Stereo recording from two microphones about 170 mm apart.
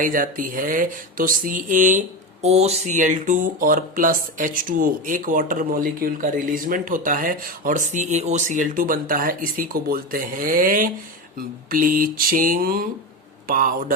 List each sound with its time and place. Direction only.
0.0 s speech: 55° right (ahead or behind)
2.4 s speech: 40° right (ahead or behind); by 10.8 s 55° right (ahead or behind)
11.3 s a sound: 55° right (ahead or behind)